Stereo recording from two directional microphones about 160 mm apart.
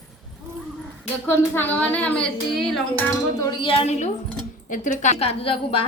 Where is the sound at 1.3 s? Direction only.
10° left (ahead or behind).